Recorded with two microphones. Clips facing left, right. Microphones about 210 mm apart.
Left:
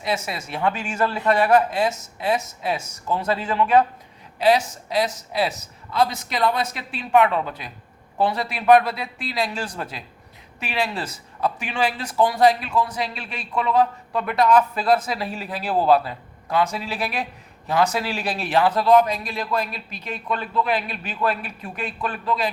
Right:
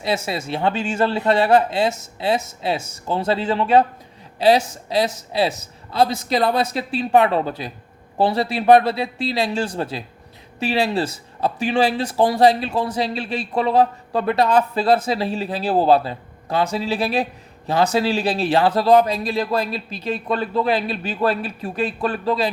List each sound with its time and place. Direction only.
0.0 s speech: 30° right (ahead or behind)